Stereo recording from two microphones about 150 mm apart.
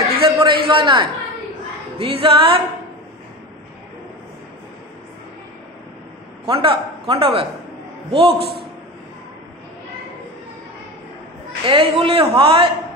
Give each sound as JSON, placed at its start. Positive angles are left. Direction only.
{"t": 0.2, "sound": "a sound", "side_deg": -35}
{"t": 2.0, "sound": "a man's voice", "side_deg": -35}
{"t": 6.4, "sound": "a man's voice", "side_deg": -35}
{"t": 8.4, "sound": "a man's voice", "side_deg": -90}
{"t": 11.6, "sound": "a man's voice", "side_deg": -35}